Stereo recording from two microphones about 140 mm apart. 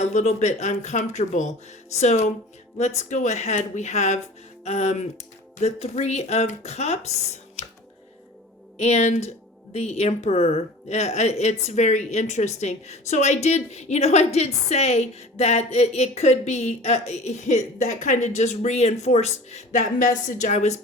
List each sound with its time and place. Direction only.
0.0 s a woman's voice: 55° left (ahead or behind)
8.8 s a woman's voice: 55° left (ahead or behind)